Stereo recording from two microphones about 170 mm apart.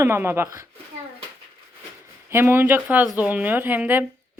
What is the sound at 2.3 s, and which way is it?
Speech, 15° right (ahead or behind).